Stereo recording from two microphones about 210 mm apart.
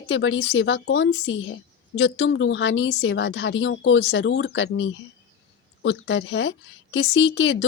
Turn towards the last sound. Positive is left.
turn(degrees=60)  # may be behind; listen again after turning